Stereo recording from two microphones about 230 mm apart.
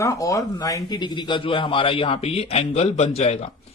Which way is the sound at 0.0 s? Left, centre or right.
Centre.